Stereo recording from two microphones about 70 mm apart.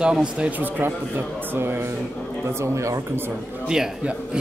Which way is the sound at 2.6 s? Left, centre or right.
Right.